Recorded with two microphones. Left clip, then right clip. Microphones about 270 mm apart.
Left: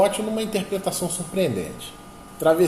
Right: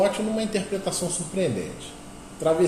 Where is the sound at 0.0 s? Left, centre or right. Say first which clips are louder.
Left 2 dB; left.